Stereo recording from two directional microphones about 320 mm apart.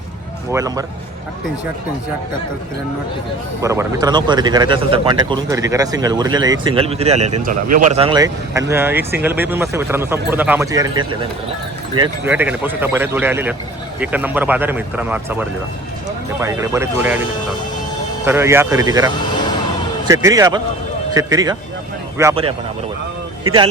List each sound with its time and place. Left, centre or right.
0.5 s speech: centre
3.6 s speech: centre
18.3 s speech: centre
20.1 s speech: centre